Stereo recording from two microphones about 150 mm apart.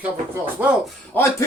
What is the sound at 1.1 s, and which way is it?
Speech, 15° left (ahead or behind).